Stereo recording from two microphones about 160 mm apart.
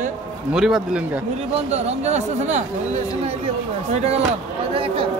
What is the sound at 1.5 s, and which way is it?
Speech, 45° right (ahead or behind).